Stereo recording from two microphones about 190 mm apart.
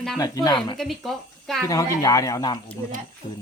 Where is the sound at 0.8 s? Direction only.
Centre (ahead or behind).